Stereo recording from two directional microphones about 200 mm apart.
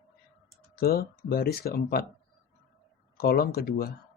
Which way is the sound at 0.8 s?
50° left (ahead or behind).